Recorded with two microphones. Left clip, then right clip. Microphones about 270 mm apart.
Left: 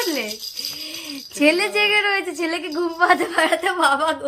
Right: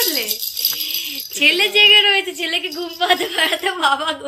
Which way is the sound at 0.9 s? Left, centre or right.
Centre.